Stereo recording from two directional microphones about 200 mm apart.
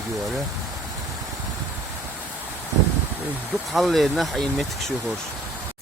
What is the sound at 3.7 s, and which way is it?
Speech, centre (ahead or behind).